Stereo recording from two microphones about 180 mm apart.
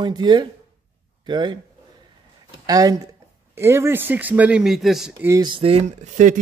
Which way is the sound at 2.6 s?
20° right (ahead or behind).